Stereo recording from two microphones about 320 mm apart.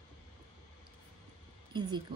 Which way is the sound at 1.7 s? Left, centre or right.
Centre.